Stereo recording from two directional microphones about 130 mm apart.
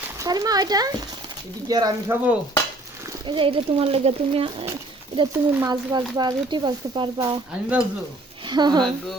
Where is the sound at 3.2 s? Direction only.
40° right (ahead or behind).